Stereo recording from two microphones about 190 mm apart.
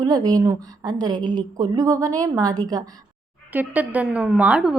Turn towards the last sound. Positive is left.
turn(degrees=-5)  # may be behind; listen again after turning